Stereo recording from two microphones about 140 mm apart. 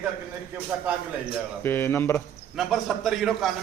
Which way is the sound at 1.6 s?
15° left (ahead or behind).